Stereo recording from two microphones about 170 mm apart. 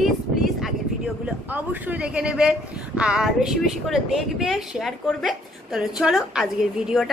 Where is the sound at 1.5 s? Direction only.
10° right (ahead or behind).